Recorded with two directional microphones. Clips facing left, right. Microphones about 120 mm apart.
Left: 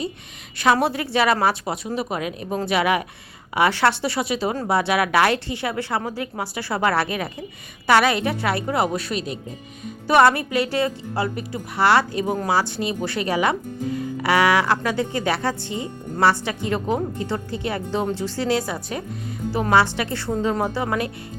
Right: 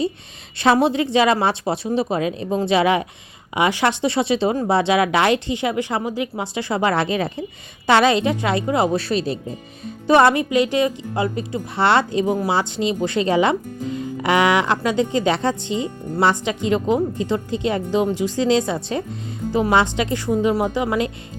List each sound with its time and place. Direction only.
0.6 s speech: 25° right (ahead or behind)
10.1 s speech: 20° right (ahead or behind)